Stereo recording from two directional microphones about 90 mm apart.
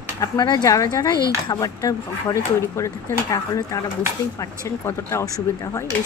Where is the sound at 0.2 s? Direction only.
40° left (ahead or behind).